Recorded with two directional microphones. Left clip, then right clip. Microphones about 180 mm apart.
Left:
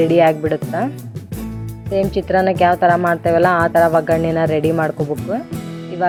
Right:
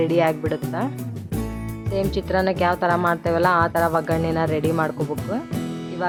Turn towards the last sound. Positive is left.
turn(degrees=15)  # may be behind; listen again after turning